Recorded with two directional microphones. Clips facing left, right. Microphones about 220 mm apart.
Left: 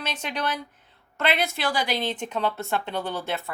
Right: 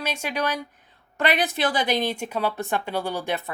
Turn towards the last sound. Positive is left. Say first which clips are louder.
# right 2 dB
turn(degrees=-15)  # may be behind; listen again after turning